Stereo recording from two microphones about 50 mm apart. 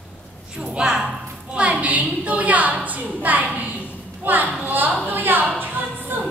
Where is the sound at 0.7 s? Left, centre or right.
Centre.